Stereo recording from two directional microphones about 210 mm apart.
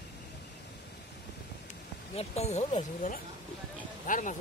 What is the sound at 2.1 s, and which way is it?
Speech, 30° left (ahead or behind).